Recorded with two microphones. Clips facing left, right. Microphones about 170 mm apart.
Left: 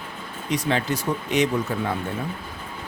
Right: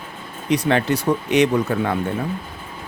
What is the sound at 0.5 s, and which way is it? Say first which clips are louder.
Speech: right 5 dB; 65° right (ahead or behind).